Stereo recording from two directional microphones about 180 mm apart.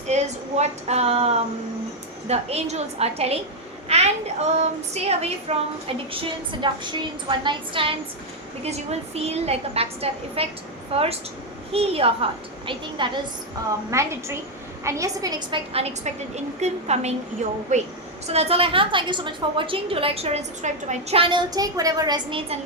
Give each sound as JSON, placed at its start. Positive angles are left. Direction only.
{"t": 0.1, "sound": "a woman's voice", "side_deg": -40}
{"t": 3.8, "sound": "a sound", "side_deg": -35}
{"t": 4.5, "sound": "a woman's voice", "side_deg": -35}
{"t": 13.9, "sound": "a woman's voice", "side_deg": -15}